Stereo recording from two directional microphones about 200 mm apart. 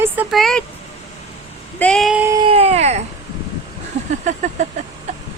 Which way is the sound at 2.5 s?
30° right (ahead or behind).